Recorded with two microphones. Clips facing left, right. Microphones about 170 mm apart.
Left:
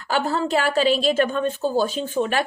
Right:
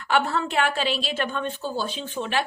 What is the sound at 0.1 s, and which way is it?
A woman's voice, 35° left (ahead or behind).